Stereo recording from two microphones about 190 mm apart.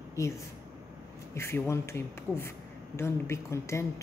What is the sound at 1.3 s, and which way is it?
Speech, 15° left (ahead or behind).